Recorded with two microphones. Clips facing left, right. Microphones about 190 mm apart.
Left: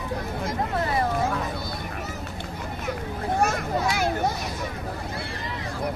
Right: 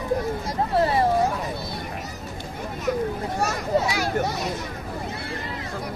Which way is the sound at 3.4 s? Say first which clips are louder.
Right 2 dB; 55° left (ahead or behind).